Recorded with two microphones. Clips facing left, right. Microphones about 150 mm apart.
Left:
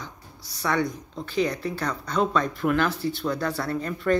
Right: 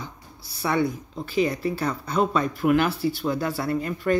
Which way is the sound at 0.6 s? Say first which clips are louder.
Right 2 dB; 10° right (ahead or behind).